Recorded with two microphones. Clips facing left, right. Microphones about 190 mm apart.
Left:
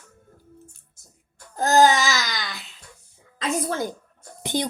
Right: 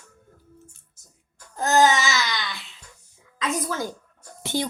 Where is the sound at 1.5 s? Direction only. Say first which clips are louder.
Left 2 dB; 35° left (ahead or behind).